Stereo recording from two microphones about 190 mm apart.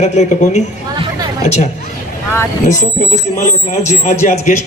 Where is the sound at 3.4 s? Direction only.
40° left (ahead or behind).